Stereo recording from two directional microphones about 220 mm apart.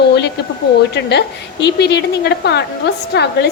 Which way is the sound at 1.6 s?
50° left (ahead or behind).